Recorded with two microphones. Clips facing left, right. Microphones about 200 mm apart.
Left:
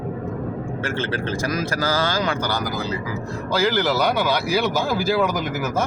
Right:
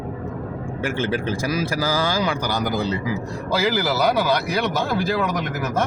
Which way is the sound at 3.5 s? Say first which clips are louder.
Left 1 dB; 5° right (ahead or behind).